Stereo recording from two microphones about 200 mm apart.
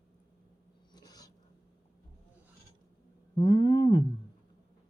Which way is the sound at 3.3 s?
20° left (ahead or behind).